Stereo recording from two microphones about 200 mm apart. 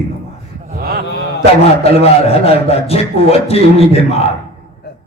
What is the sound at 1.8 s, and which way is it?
A man's voice, 30° left (ahead or behind).